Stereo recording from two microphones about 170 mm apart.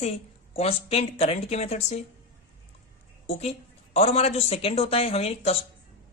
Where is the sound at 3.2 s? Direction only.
40° left (ahead or behind).